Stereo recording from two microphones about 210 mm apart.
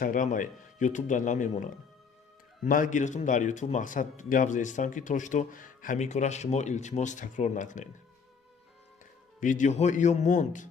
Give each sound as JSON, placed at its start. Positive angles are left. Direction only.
{"t": 0.0, "sound": "a man's voice", "side_deg": 40}
{"t": 2.6, "sound": "a man's voice", "side_deg": 40}
{"t": 9.4, "sound": "a man's voice", "side_deg": 35}